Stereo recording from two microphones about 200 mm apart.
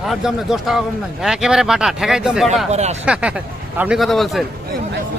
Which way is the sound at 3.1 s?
5° right (ahead or behind).